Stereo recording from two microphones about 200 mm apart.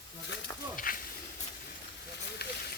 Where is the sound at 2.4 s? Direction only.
50° left (ahead or behind).